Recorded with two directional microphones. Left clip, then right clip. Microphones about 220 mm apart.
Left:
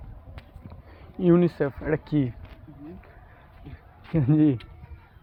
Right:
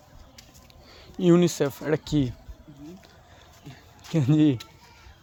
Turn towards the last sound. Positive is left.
turn(degrees=-5)  # may be behind; listen again after turning